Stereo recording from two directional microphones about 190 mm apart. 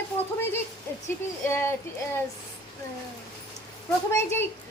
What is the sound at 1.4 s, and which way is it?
Speech, 15° left (ahead or behind).